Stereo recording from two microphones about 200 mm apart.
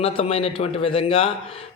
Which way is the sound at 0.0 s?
25° left (ahead or behind).